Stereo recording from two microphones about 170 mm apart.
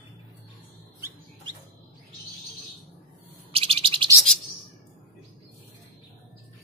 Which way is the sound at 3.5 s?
35° right (ahead or behind).